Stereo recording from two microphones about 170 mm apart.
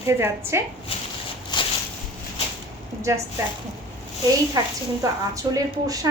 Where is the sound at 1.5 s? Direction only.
25° left (ahead or behind).